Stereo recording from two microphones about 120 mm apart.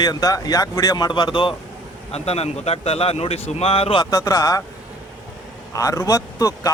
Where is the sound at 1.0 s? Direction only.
40° left (ahead or behind).